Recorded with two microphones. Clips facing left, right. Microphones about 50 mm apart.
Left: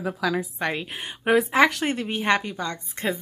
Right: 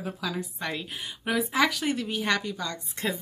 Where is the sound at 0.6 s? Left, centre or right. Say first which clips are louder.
Left 5 dB; left.